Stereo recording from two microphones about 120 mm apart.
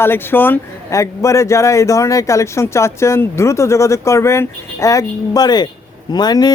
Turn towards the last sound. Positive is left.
turn(degrees=35)  # may be behind; listen again after turning